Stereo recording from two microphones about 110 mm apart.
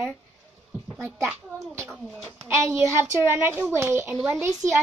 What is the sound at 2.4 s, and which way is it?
A woman's voice, 20° right (ahead or behind).